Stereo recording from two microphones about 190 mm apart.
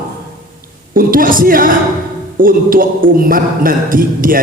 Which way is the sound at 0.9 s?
45° right (ahead or behind).